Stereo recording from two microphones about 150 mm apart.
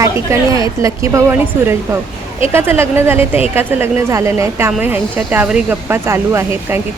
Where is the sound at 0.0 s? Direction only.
25° right (ahead or behind).